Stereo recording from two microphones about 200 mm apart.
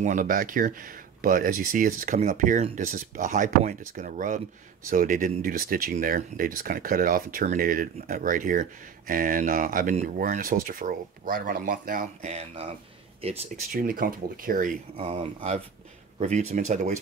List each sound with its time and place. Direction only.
0.0 s speech: 40° right (ahead or behind)
13.7 s speech: 45° right (ahead or behind)
15.0 s speech: 30° right (ahead or behind)